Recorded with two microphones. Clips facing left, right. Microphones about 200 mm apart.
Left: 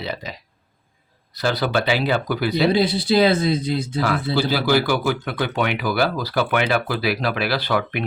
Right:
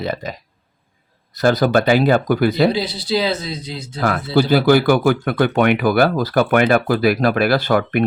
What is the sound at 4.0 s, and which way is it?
Speech, 50° right (ahead or behind).